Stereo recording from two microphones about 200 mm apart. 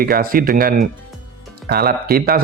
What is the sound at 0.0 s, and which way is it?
Speech, 45° right (ahead or behind).